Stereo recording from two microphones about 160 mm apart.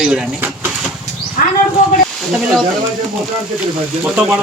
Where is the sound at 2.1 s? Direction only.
Centre (ahead or behind).